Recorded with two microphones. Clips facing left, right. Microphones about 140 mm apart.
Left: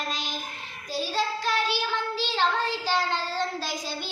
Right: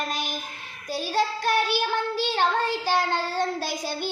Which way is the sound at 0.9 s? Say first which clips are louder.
Right 3 dB; 55° right (ahead or behind).